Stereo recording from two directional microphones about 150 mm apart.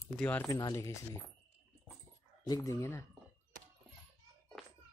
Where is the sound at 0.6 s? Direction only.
25° left (ahead or behind).